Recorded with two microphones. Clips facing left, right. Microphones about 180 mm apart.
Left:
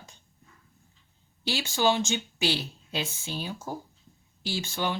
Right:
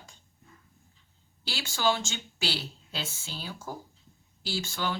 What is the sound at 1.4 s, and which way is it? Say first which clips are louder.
A woman's voice: left 3 dB; 20° left (ahead or behind).